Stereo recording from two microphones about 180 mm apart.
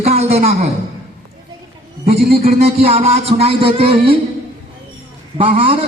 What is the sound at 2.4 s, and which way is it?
Speech, 35° right (ahead or behind).